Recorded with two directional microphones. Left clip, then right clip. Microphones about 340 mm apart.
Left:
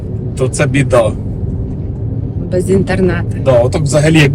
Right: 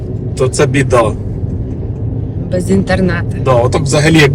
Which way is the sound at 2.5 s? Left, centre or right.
Centre.